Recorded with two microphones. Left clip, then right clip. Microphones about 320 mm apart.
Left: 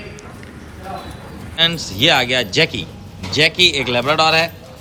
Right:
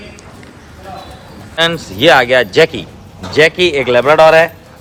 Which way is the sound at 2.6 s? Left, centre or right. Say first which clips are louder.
Right 6 dB; centre.